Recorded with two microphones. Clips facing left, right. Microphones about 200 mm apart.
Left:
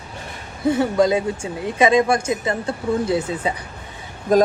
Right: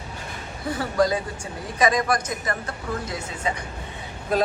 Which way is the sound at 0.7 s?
25° left (ahead or behind).